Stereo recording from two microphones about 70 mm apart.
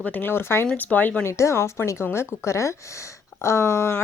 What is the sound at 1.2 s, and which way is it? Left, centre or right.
A woman's voice, left.